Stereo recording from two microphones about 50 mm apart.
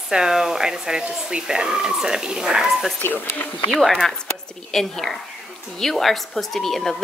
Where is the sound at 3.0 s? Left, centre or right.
Left.